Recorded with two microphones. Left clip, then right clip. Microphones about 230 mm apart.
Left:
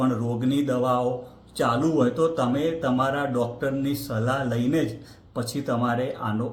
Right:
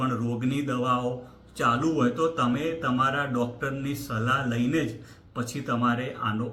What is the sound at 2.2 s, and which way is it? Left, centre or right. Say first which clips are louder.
A man's voice: left 3 dB; centre.